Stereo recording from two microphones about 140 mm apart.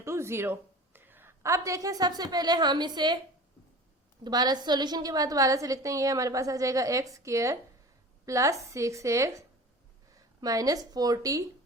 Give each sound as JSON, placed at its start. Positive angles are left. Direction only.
{"t": 0.0, "sound": "a woman's voice", "side_deg": -20}
{"t": 4.2, "sound": "a woman's voice", "side_deg": -30}